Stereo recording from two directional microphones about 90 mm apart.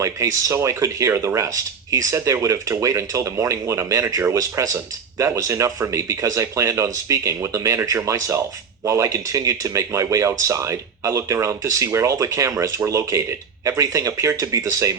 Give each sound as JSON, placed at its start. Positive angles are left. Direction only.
{"t": 0.0, "sound": "speech", "side_deg": -40}